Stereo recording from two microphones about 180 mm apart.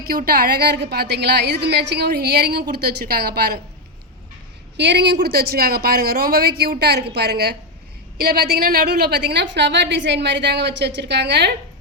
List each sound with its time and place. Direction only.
0.1 s a woman's voice: 55° right (ahead or behind)
4.8 s a woman's voice: 70° right (ahead or behind)